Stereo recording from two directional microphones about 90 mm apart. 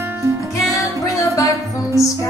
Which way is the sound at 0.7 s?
35° left (ahead or behind).